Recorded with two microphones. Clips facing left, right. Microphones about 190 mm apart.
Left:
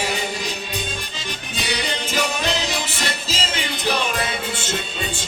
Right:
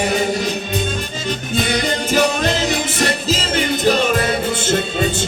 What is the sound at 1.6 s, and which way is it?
Music, 50° right (ahead or behind).